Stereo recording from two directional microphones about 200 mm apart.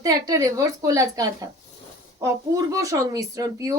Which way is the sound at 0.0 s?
15° right (ahead or behind).